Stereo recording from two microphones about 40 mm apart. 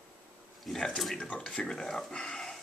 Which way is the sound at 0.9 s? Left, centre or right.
Centre.